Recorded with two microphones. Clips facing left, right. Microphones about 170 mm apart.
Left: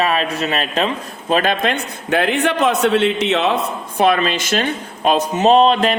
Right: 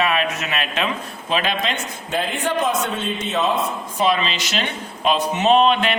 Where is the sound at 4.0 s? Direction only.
55° left (ahead or behind); by 6.0 s 40° left (ahead or behind).